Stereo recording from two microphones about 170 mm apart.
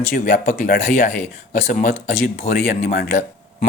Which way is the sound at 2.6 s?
65° left (ahead or behind).